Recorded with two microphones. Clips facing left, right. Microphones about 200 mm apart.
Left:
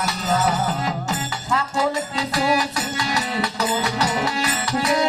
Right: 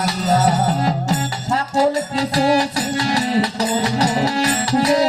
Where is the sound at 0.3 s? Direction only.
35° right (ahead or behind).